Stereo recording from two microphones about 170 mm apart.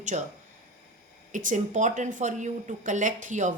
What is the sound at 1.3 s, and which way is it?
A woman's voice, 50° right (ahead or behind).